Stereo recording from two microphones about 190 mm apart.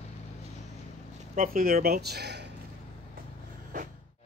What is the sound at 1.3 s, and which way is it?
Speech, 50° right (ahead or behind).